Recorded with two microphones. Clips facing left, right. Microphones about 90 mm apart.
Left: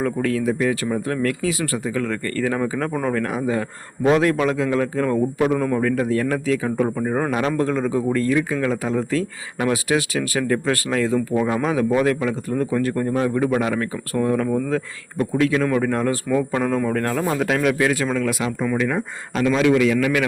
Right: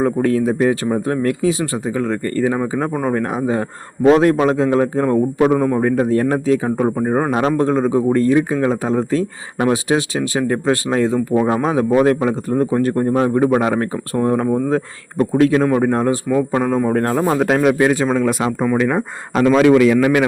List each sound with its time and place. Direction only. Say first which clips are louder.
0.0 s speech: right 5 dB; 35° right (ahead or behind)
3.3 s speech: right 3 dB; 30° right (ahead or behind)
16.6 s speech: right 4 dB; 15° right (ahead or behind)
16.8 s speech: right 5 dB; 35° right (ahead or behind)
18.3 s speech: right 5 dB; 40° right (ahead or behind)
18.9 s a man's voice: right 6 dB; 50° right (ahead or behind)